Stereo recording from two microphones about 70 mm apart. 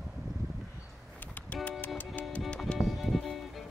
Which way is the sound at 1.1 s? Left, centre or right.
Left.